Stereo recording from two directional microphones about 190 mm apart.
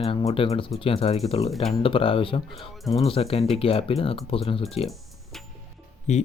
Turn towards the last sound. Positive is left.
turn(degrees=35)  # may be behind; listen again after turning